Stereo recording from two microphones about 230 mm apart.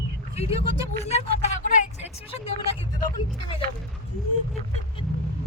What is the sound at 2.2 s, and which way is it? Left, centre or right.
A woman's voice, left.